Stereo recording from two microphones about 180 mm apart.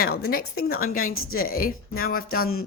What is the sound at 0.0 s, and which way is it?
A woman's voice, 55° left (ahead or behind).